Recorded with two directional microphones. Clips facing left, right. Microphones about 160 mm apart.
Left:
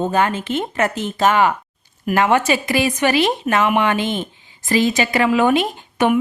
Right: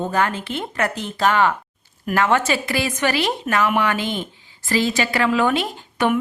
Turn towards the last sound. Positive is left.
turn(degrees=15)  # may be behind; listen again after turning